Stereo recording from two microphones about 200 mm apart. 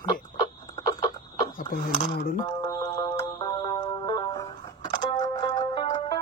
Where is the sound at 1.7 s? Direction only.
50° left (ahead or behind).